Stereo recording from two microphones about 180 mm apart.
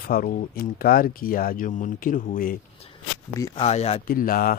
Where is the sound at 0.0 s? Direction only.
50° left (ahead or behind).